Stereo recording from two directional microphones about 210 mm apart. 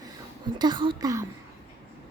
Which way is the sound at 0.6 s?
20° right (ahead or behind).